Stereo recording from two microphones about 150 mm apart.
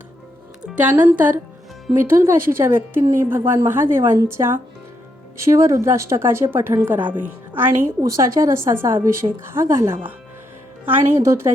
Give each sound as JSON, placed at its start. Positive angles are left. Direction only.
{"t": 0.6, "sound": "a woman's voice", "side_deg": -10}